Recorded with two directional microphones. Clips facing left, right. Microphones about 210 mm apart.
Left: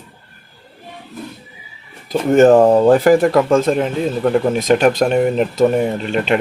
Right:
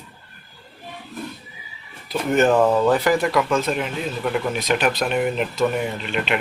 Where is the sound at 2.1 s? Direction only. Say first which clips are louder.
Left 8 dB; 45° left (ahead or behind).